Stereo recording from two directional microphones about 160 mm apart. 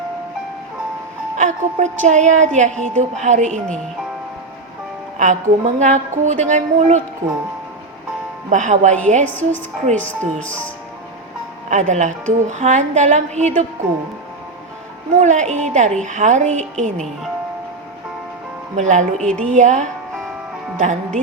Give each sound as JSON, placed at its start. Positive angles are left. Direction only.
{"t": 1.4, "sound": "a woman's voice", "side_deg": -50}
{"t": 5.1, "sound": "a woman's voice", "side_deg": -50}
{"t": 8.4, "sound": "a woman's voice", "side_deg": -50}
{"t": 9.9, "sound": "speech", "side_deg": 10}
{"t": 11.7, "sound": "a woman's voice", "side_deg": -45}
{"t": 15.1, "sound": "a woman's voice", "side_deg": -50}
{"t": 18.8, "sound": "a woman's voice", "side_deg": -50}